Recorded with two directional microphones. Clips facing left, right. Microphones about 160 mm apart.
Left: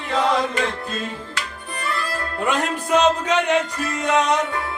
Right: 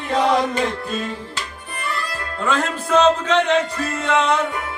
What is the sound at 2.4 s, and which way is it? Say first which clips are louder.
A man's voice: right 1 dB; 15° left (ahead or behind).